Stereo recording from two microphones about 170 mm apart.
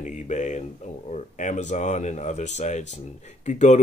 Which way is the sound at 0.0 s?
45° left (ahead or behind).